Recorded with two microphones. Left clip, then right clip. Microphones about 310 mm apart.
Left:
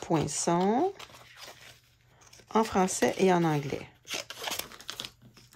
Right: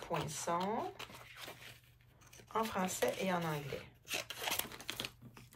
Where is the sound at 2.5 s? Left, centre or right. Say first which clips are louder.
Left 10 dB; centre.